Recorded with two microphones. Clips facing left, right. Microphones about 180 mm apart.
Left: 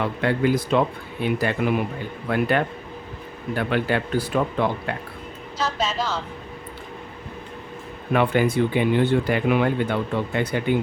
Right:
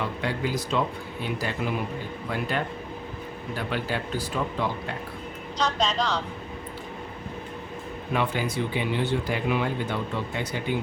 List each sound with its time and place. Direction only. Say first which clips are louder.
0.0 s speech: left 7 dB; 60° left (ahead or behind)
5.5 s speech: even; 5° left (ahead or behind)
8.1 s speech: left 7 dB; 55° left (ahead or behind)